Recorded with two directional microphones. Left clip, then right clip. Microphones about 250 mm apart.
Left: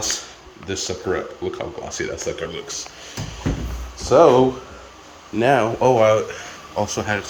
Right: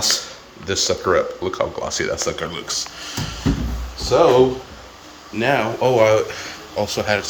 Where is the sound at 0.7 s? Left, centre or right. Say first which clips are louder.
Right 6 dB; centre.